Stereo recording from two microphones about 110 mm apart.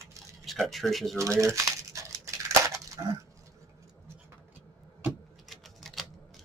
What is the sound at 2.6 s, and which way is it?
Dog, 30° right (ahead or behind).